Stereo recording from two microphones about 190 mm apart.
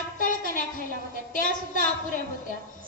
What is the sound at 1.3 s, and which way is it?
A woman's voice, 45° left (ahead or behind).